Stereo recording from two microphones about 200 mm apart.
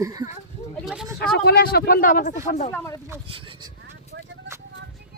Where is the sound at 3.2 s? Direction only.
25° right (ahead or behind).